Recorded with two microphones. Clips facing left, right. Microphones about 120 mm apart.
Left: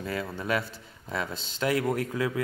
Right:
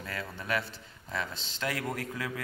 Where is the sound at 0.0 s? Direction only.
15° left (ahead or behind).